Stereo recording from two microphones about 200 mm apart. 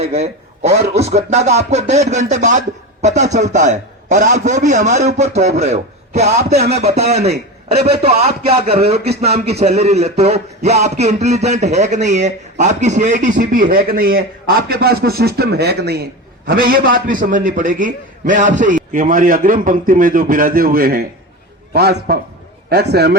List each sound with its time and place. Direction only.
0.0 s a man's voice: 35° right (ahead or behind); by 23.1 s 55° right (ahead or behind)